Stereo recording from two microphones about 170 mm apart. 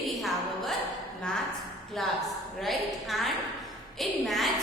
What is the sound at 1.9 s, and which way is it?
A woman's voice, centre (ahead or behind).